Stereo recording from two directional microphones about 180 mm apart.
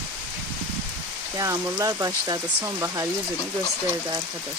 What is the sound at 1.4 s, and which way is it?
Speech, 15° right (ahead or behind).